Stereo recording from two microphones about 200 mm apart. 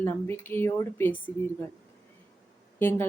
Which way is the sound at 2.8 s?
10° left (ahead or behind).